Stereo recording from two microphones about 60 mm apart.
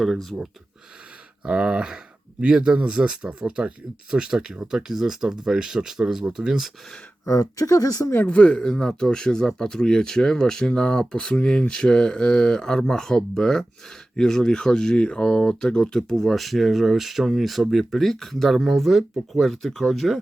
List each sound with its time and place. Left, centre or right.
0.0 s speech: centre
1.5 s speech: centre
7.3 s speech: left
8.1 s speech: left
8.4 s speech: centre